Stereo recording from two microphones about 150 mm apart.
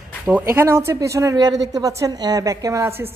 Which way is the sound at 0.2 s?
15° right (ahead or behind).